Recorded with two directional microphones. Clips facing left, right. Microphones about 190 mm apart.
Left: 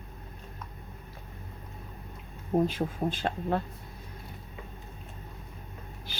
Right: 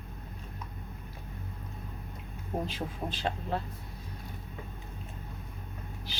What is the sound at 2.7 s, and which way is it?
Speech, 50° left (ahead or behind).